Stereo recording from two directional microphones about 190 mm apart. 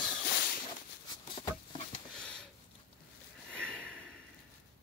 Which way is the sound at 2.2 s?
5° left (ahead or behind).